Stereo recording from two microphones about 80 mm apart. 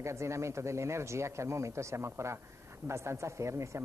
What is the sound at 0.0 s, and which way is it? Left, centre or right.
A woman's voice, right.